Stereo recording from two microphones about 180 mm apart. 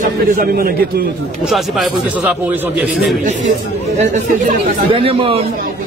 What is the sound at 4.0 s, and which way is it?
Speech, 35° right (ahead or behind).